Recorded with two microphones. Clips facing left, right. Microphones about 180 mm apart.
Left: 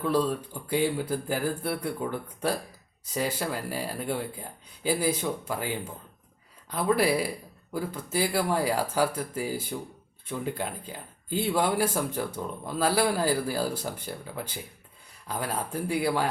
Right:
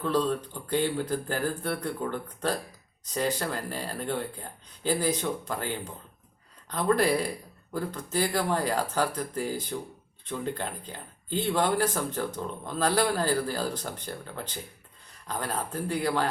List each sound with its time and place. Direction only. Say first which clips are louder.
0.0 s speech: left 1 dB; 10° left (ahead or behind)